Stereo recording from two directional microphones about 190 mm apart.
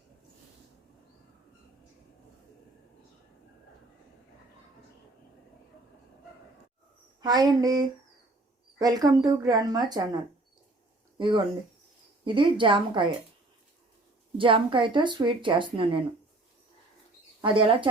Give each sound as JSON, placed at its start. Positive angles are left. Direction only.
{"t": 7.2, "sound": "speech", "side_deg": -20}
{"t": 11.2, "sound": "speech", "side_deg": -25}
{"t": 14.3, "sound": "speech", "side_deg": -25}
{"t": 17.4, "sound": "speech", "side_deg": -25}